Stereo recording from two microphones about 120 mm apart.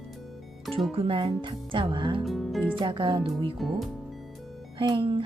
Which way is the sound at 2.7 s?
40° right (ahead or behind).